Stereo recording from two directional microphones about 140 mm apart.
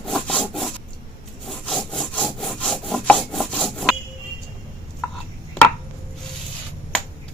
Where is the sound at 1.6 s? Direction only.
5° left (ahead or behind).